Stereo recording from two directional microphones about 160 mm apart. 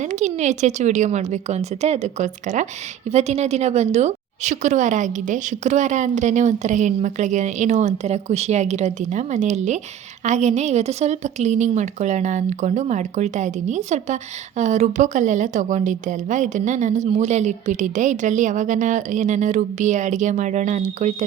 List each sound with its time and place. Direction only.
0.0 s a woman's voice: 50° right (ahead or behind)